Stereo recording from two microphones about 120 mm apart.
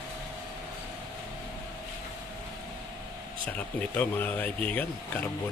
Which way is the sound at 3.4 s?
10° left (ahead or behind).